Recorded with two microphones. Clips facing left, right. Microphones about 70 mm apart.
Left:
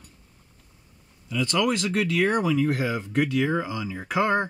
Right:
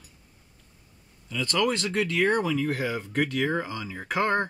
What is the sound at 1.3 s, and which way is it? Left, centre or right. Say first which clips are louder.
Speech: left 2 dB; centre.